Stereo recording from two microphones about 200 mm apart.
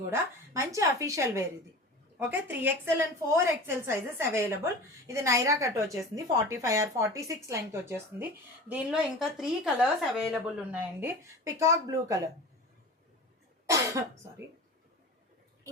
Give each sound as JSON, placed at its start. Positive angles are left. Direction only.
{"t": 0.1, "sound": "a woman's voice", "side_deg": -15}
{"t": 13.7, "sound": "cough", "side_deg": -15}